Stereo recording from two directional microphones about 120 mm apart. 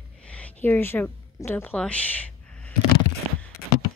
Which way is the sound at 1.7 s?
10° left (ahead or behind).